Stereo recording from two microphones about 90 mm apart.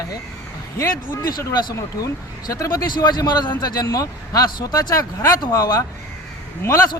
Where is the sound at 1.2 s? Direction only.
45° left (ahead or behind).